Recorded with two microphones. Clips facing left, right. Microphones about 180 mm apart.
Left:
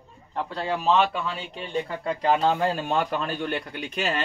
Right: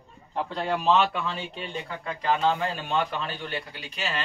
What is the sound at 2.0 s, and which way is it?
A man's voice, 35° left (ahead or behind).